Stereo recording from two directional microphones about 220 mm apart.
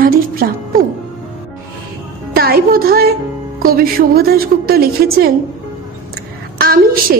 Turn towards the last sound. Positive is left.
turn(degrees=-45)  # may be behind; listen again after turning